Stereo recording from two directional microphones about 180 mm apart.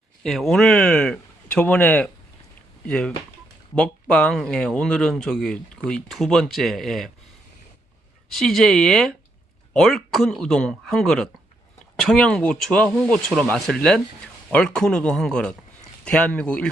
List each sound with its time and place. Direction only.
0.2 s a man's voice: centre (ahead or behind)
8.3 s speech: centre (ahead or behind)